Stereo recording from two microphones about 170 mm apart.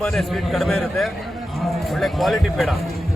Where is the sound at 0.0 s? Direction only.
Centre (ahead or behind).